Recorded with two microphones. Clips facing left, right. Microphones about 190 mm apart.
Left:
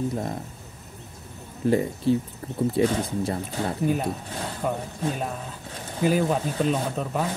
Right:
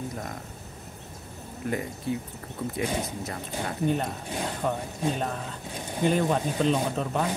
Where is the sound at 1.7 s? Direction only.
30° left (ahead or behind).